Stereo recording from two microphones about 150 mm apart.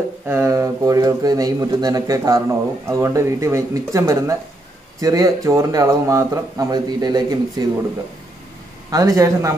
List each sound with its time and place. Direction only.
0.3 s a man's voice: 20° right (ahead or behind)
8.9 s a man's voice: 20° right (ahead or behind)